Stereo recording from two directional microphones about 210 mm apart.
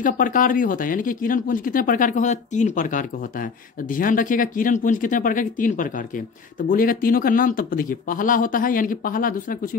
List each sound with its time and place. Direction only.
0.0 s speech: 40° left (ahead or behind)